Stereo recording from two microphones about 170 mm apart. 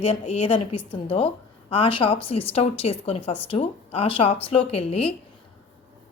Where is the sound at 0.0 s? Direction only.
35° left (ahead or behind).